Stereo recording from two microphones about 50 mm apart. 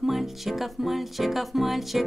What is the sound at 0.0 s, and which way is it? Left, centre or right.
Music, centre.